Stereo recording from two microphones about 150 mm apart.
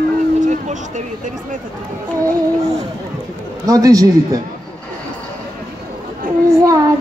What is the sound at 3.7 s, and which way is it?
Speech, 25° right (ahead or behind).